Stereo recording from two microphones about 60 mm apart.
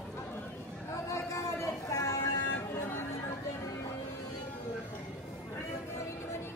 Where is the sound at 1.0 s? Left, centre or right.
Left.